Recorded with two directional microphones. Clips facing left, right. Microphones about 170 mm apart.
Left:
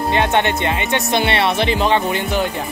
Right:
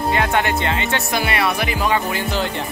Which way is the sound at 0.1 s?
25° left (ahead or behind).